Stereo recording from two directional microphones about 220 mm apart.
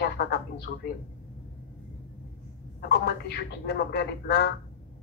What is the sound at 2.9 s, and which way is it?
A man's voice, 50° left (ahead or behind).